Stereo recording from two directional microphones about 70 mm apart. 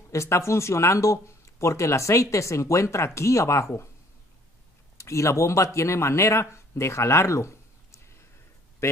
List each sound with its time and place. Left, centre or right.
0.1 s speech: left
4.9 s speech: left
8.8 s a sound: left